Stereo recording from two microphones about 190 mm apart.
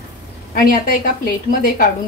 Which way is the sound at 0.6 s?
50° left (ahead or behind).